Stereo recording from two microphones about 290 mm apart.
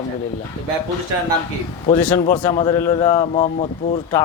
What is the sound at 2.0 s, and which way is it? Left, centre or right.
A man's voice, left.